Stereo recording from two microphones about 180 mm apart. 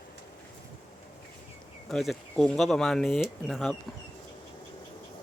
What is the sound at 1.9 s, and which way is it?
Speech, centre (ahead or behind).